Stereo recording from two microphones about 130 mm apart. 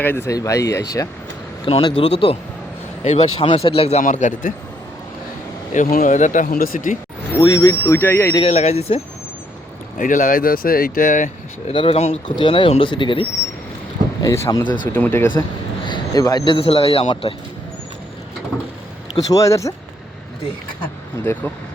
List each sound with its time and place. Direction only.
0.0 s speech: 15° left (ahead or behind)
0.3 s speech: 25° left (ahead or behind)
1.6 s speech: 40° left (ahead or behind)
4.0 s speech: 70° left (ahead or behind)
5.7 s speech: 80° left
7.3 s speech: 25° left (ahead or behind)
8.4 s speech: 55° left (ahead or behind)
10.0 s speech: 90° left
11.7 s speech: 45° left (ahead or behind)
14.2 s speech: 25° left (ahead or behind)
15.9 s speech: 30° left (ahead or behind)
19.1 s speech: 25° left (ahead or behind)